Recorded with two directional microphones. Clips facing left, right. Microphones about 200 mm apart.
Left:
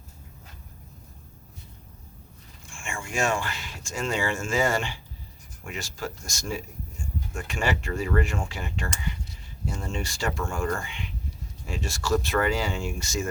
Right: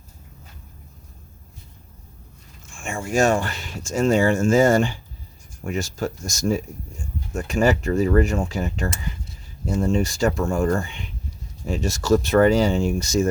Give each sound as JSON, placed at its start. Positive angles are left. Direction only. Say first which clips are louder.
{"t": 2.8, "sound": "speech", "louder": "right 8 dB", "side_deg": -40}